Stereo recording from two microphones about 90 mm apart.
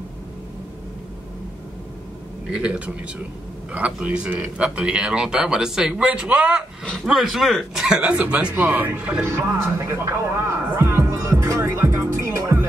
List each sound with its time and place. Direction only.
2.5 s speech: 10° right (ahead or behind)
7.1 s speech: centre (ahead or behind)
9.2 s speech: 30° right (ahead or behind)
10.8 s music: 30° right (ahead or behind)